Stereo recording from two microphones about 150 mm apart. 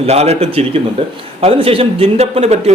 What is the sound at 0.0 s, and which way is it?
A man's voice, 45° right (ahead or behind).